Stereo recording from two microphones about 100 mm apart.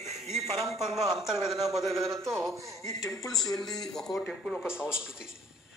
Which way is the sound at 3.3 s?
Centre (ahead or behind).